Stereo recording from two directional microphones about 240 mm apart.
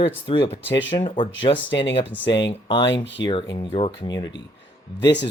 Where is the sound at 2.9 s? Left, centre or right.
Left.